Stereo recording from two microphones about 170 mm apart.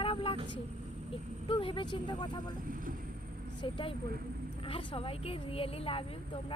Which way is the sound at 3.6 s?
30° left (ahead or behind).